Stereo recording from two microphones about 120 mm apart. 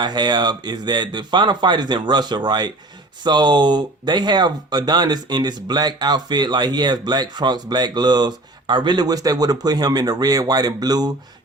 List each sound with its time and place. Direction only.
0.0 s speech: 35° right (ahead or behind)